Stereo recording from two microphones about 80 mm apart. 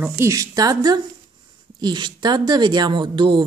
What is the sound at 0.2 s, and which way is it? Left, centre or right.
Speech, right.